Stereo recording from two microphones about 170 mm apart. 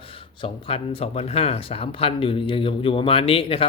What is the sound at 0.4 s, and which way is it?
A man's voice, 35° left (ahead or behind).